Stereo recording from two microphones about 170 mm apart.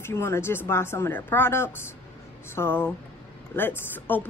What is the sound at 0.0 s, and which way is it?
A woman's voice, 15° left (ahead or behind).